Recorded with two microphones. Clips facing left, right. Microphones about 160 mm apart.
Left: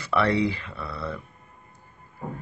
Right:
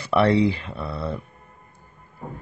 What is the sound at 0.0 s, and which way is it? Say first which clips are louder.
Speech: right 5 dB; 25° right (ahead or behind).